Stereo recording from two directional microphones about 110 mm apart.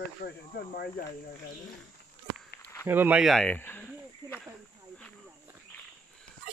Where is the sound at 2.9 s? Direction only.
15° right (ahead or behind).